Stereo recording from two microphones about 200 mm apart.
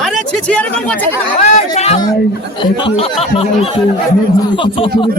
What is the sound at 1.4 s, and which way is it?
Speech, 30° left (ahead or behind).